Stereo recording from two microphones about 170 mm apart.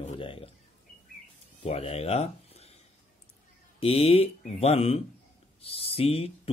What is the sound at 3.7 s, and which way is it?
Speech, 35° left (ahead or behind).